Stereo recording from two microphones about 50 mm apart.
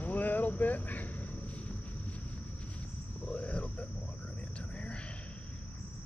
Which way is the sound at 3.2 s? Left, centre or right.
Left.